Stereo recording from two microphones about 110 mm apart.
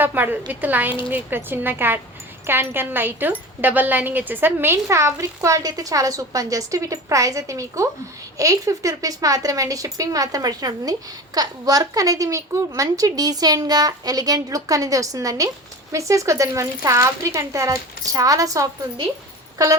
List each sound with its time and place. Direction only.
0.0 s a woman's voice: 15° right (ahead or behind)